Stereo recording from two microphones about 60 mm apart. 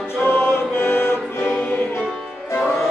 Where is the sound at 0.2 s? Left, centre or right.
Left.